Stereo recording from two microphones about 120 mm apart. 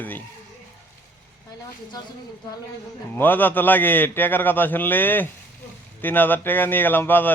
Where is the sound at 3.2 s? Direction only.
15° left (ahead or behind).